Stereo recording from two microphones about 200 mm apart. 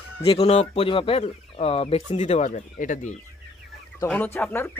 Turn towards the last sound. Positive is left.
turn(degrees=10)  # may be behind; listen again after turning